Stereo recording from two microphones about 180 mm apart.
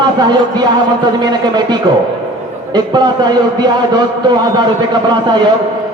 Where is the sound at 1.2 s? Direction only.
25° right (ahead or behind).